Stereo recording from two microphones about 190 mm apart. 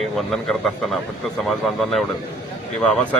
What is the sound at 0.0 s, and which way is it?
A man's voice, centre (ahead or behind).